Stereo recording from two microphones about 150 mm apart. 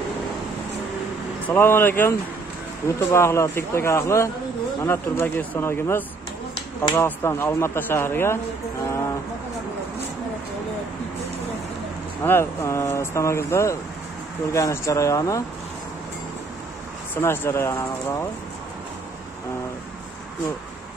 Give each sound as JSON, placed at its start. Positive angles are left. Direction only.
{"t": 1.5, "sound": "speech", "side_deg": 15}
{"t": 12.2, "sound": "speech", "side_deg": 15}
{"t": 17.1, "sound": "speech", "side_deg": 15}